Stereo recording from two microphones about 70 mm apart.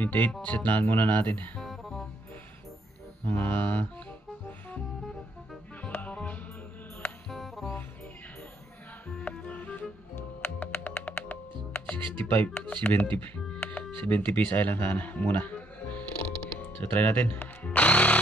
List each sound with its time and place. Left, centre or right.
0.0 s speech: left
1.6 s music: centre
3.3 s speech: left
4.5 s music: left
7.2 s music: centre
9.5 s music: left
10.1 s music: left
12.5 s speech: left
13.6 s music: centre
14.0 s speech: left
17.6 s music: left